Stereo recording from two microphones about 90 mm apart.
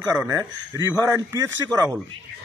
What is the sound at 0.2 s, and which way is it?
A man's voice, 35° right (ahead or behind).